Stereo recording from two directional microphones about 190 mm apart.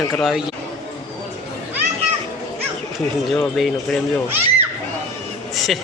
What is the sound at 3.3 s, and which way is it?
Speech, 5° left (ahead or behind).